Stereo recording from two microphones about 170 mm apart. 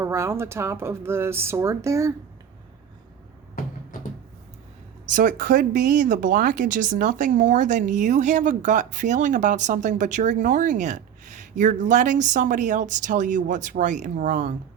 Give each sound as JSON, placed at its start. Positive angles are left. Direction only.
{"t": 0.0, "sound": "speech", "side_deg": -15}
{"t": 5.1, "sound": "speech", "side_deg": -55}